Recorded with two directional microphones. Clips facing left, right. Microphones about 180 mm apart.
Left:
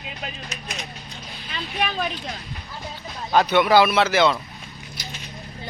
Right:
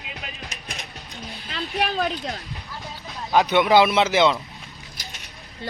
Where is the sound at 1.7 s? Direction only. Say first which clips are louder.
Right 2 dB; 40° right (ahead or behind).